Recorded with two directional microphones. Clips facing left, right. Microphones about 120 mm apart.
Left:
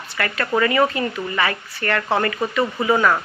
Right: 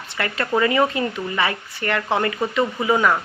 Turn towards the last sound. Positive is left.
turn(degrees=-15)  # may be behind; listen again after turning